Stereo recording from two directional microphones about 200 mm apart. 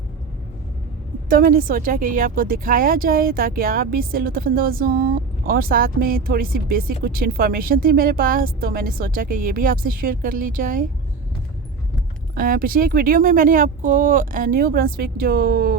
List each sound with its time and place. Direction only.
1.3 s a woman's voice: 45° right (ahead or behind)
12.3 s a woman's voice: 45° right (ahead or behind)